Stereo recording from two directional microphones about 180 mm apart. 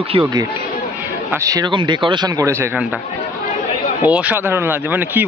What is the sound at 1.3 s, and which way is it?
A man's voice, 20° right (ahead or behind).